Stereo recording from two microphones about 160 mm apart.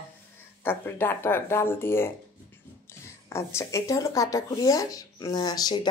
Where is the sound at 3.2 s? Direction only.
15° left (ahead or behind).